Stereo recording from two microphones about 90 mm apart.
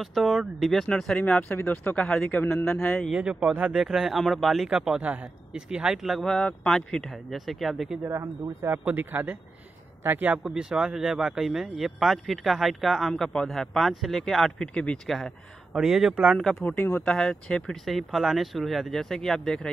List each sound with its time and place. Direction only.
0.0 s speech: centre (ahead or behind)
3.1 s a man's voice: 10° right (ahead or behind)
8.0 s speech: 35° right (ahead or behind)
8.9 s speech: 20° right (ahead or behind)
10.4 s speech: 5° right (ahead or behind); by 15.0 s 10° left (ahead or behind)
15.0 s speech: centre (ahead or behind)
16.5 s speech: 25° left (ahead or behind)
17.0 s speech: 10° left (ahead or behind)